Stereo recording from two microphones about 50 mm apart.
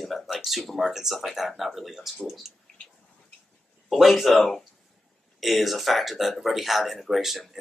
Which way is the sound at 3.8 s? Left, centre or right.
Centre.